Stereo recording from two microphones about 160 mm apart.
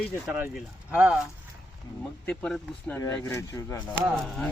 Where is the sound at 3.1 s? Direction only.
15° left (ahead or behind).